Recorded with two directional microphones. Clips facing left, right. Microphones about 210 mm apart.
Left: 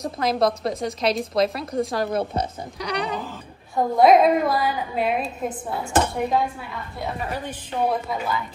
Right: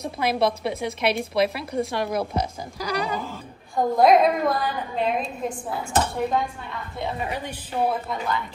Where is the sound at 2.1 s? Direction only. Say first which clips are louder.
Left 1 dB; 30° left (ahead or behind).